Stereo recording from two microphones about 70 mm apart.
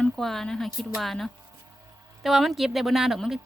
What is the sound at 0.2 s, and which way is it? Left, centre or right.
Speech, centre.